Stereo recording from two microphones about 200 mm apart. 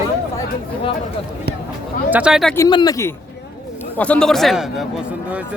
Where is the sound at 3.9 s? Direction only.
5° left (ahead or behind).